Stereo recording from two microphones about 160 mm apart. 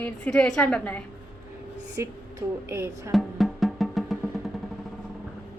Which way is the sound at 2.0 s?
20° right (ahead or behind).